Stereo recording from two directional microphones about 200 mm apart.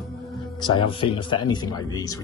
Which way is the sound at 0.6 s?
25° left (ahead or behind).